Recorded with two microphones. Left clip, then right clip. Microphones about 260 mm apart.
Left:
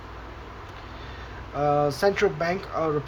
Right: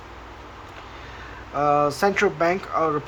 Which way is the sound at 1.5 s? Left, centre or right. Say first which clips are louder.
Right 3 dB; centre.